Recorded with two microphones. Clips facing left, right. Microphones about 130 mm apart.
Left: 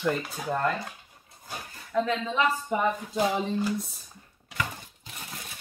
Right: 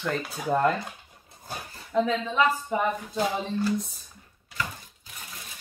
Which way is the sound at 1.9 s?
20° right (ahead or behind).